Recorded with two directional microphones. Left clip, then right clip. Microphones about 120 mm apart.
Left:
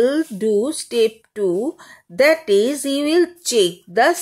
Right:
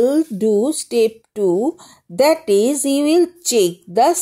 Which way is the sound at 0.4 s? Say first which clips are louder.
Right 2 dB; 40° right (ahead or behind).